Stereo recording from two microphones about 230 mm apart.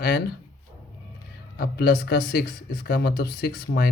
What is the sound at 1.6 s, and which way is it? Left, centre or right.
Speech, left.